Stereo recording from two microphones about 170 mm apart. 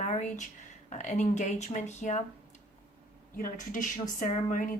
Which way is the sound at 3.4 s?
50° left (ahead or behind).